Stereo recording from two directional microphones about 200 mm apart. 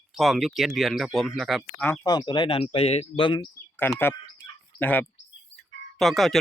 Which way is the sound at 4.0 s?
10° left (ahead or behind).